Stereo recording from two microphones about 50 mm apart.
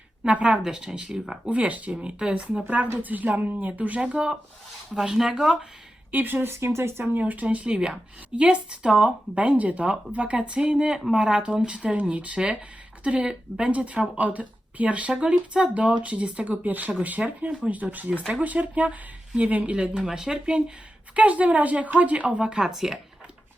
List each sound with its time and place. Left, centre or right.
0.3 s speech: right
0.5 s speech: centre
1.5 s speech: right
4.9 s speech: centre
6.1 s speech: right
6.7 s speech: right
7.0 s speech: right; by 20.4 s centre
21.2 s speech: right
22.7 s speech: centre